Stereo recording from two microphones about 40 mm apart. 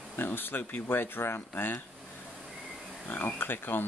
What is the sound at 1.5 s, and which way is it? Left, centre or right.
Speech, left.